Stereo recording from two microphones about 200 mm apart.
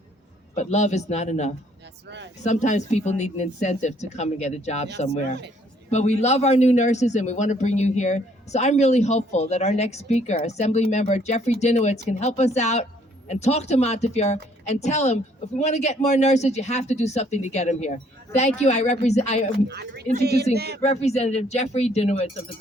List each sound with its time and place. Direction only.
0.5 s a man's voice: 35° left (ahead or behind)
2.0 s speech: 60° right (ahead or behind)
2.4 s a man's voice: 35° left (ahead or behind)
19.6 s a woman's voice: 55° right (ahead or behind)
20.8 s a man's voice: 35° left (ahead or behind)